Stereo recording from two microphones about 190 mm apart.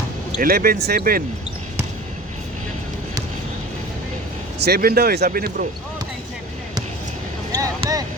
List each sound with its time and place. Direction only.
0.3 s speech: 50° right (ahead or behind)
4.6 s speech: 55° right (ahead or behind)
7.5 s a sound: 20° right (ahead or behind)